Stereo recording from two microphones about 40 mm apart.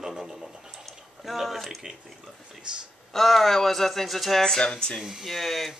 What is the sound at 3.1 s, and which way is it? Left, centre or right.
Speech, centre.